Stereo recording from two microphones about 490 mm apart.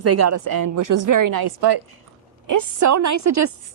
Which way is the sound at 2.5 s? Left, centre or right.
Right.